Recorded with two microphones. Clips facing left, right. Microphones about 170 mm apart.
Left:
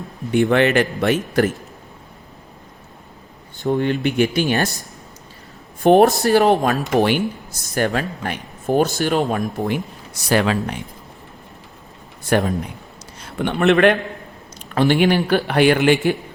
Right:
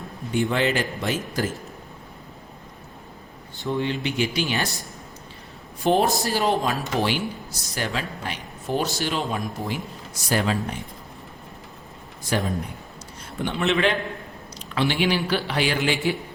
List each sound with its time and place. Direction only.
0.3 s speech: 65° left (ahead or behind)
3.7 s speech: 50° left (ahead or behind)
5.8 s speech: 55° left (ahead or behind)
6.2 s speech: 65° left (ahead or behind); by 10.8 s 80° left
12.2 s a man's voice: 60° left (ahead or behind)
13.1 s a man's voice: 80° left; by 16.0 s 55° left (ahead or behind)